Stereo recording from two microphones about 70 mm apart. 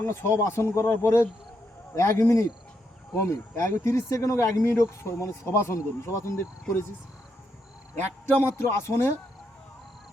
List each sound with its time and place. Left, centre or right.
0.0 s speech: left
3.2 s speech: left
8.4 s speech: left